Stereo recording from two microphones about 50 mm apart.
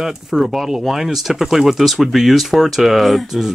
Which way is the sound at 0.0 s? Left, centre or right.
Centre.